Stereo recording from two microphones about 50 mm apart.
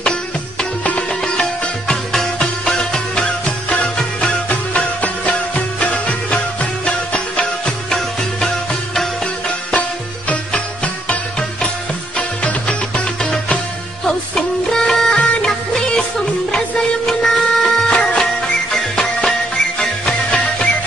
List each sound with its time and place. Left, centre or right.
0.0 s music: centre
7.6 s music: centre
9.8 s music: left; by 17.8 s centre
17.8 s music: centre
19.2 s music: centre